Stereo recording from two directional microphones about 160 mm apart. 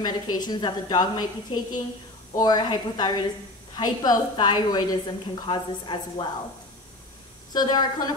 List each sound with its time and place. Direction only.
0.0 s a woman's voice: 25° left (ahead or behind)
7.5 s a woman's voice: 25° left (ahead or behind)